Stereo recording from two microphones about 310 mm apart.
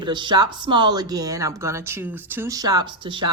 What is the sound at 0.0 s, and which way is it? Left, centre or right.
Speech, centre.